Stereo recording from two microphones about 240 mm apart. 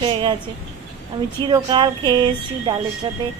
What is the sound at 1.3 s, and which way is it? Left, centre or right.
A woman's voice, centre.